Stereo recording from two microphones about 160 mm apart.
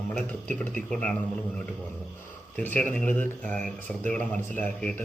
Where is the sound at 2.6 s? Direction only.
10° left (ahead or behind).